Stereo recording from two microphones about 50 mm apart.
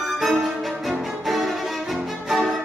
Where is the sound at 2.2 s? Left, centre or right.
Centre.